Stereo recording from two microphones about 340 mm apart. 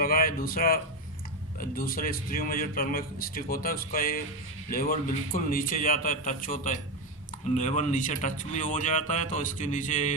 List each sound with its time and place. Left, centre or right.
0.0 s a man's voice: left